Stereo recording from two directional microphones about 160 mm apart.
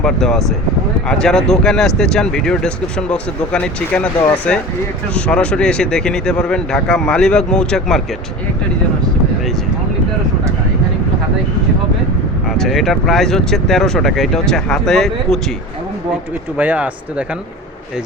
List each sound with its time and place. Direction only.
0.0 s speech: centre (ahead or behind)
12.5 s speech: centre (ahead or behind)
16.6 s speech: 10° right (ahead or behind)